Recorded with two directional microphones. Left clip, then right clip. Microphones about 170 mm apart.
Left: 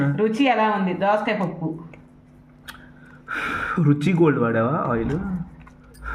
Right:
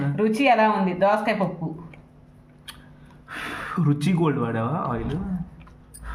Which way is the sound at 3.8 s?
5° left (ahead or behind).